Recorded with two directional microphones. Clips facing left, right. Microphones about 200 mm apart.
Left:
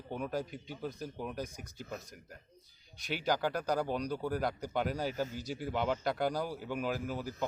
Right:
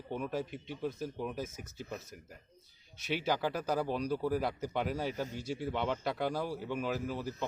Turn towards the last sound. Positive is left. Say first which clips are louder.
# right 1 dB
turn(degrees=0)  # may be behind; listen again after turning